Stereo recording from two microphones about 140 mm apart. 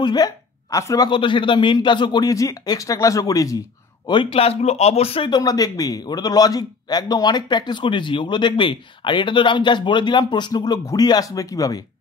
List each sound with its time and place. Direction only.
0.0 s speech: 30° left (ahead or behind)
4.1 s speech: 40° left (ahead or behind)
5.3 s a man's voice: 25° left (ahead or behind)